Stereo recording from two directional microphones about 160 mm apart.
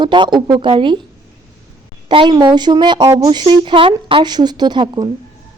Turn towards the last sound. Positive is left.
turn(degrees=-25)  # may be behind; listen again after turning